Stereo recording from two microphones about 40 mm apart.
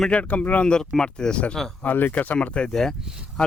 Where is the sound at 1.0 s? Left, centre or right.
Centre.